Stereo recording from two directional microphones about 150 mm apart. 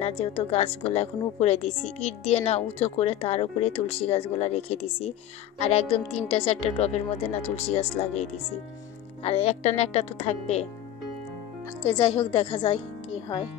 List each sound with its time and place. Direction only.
0.0 s a woman's voice: 40° left (ahead or behind)
11.8 s a woman's voice: 45° left (ahead or behind)